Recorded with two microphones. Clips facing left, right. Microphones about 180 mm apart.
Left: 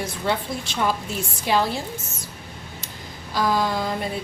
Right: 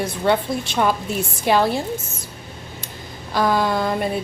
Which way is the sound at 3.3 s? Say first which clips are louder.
Right 3 dB; 60° right (ahead or behind).